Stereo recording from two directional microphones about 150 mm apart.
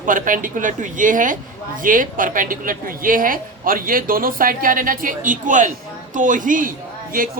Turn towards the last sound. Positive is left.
turn(degrees=-70)  # may be behind; listen again after turning